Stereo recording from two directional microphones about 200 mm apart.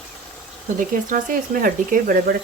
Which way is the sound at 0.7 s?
40° right (ahead or behind).